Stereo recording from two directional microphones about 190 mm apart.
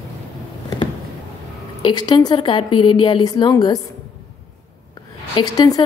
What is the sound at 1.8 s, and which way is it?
A woman's voice, 25° left (ahead or behind).